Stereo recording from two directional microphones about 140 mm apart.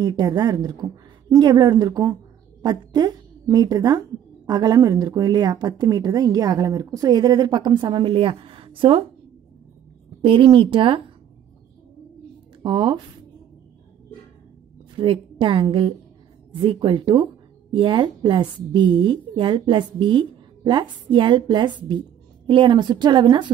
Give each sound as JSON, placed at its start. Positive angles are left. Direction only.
{"t": 0.0, "sound": "a woman's voice", "side_deg": -30}
{"t": 10.2, "sound": "a woman's voice", "side_deg": -40}
{"t": 12.6, "sound": "a woman's voice", "side_deg": -35}
{"t": 15.0, "sound": "a woman's voice", "side_deg": -40}